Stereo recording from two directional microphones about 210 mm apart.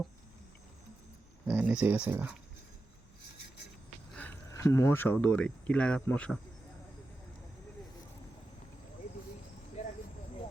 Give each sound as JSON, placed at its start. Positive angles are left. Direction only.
{"t": 1.5, "sound": "speech", "side_deg": -10}
{"t": 4.1, "sound": "speech", "side_deg": 10}
{"t": 9.8, "sound": "cricket", "side_deg": 35}